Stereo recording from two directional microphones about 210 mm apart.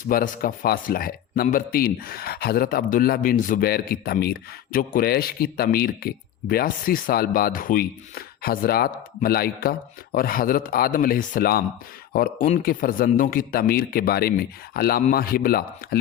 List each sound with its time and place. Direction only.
0.1 s speech: 45° left (ahead or behind)